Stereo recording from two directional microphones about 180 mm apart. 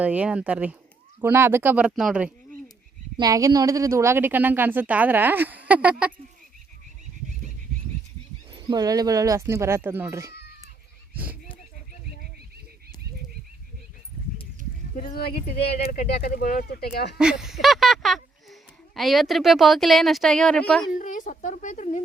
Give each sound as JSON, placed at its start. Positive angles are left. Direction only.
{"t": 0.0, "sound": "speech", "side_deg": -10}
{"t": 3.2, "sound": "speech", "side_deg": -20}
{"t": 8.5, "sound": "speech", "side_deg": -20}
{"t": 15.0, "sound": "speech", "side_deg": 60}
{"t": 17.2, "sound": "speech", "side_deg": -5}
{"t": 20.9, "sound": "a woman's voice", "side_deg": 45}